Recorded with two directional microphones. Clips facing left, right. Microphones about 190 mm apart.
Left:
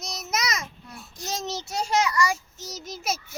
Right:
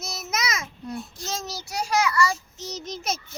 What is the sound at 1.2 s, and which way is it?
A child's voice, 20° left (ahead or behind).